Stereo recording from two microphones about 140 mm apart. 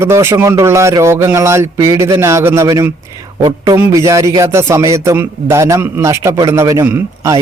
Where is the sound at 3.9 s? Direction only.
25° right (ahead or behind).